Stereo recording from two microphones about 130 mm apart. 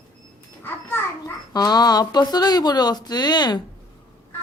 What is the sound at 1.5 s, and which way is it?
Speech, 30° left (ahead or behind).